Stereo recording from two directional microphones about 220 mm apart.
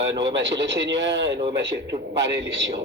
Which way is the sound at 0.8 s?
55° right (ahead or behind).